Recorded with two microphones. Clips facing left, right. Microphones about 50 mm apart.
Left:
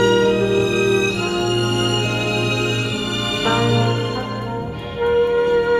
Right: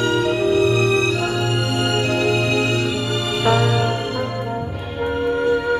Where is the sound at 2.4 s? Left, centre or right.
Right.